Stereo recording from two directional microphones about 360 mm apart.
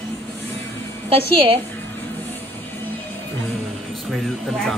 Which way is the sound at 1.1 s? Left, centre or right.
Centre.